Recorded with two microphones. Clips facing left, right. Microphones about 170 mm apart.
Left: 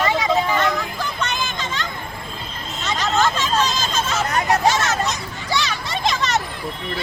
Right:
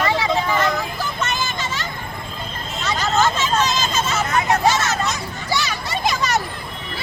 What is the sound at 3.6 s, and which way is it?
Vehicle, 10° left (ahead or behind).